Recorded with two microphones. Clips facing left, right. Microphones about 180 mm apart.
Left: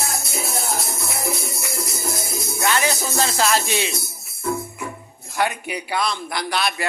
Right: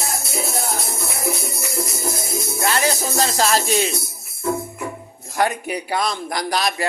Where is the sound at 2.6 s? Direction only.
35° right (ahead or behind).